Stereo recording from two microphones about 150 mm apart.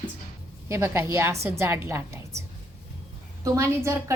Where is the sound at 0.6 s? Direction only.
20° right (ahead or behind).